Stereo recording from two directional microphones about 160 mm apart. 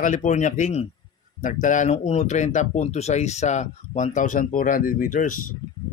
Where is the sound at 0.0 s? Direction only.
50° left (ahead or behind).